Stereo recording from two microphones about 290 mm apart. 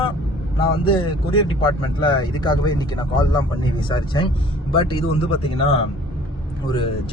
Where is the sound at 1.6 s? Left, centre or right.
Centre.